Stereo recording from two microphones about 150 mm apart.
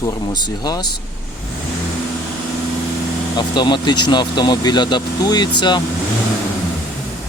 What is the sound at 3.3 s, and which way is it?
A man's voice, 30° left (ahead or behind).